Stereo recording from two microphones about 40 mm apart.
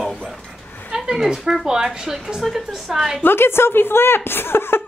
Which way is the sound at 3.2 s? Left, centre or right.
Left.